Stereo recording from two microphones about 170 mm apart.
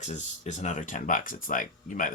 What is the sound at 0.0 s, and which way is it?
Speech, 40° left (ahead or behind).